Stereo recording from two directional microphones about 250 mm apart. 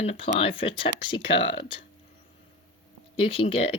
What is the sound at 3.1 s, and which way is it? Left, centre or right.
Speech, left.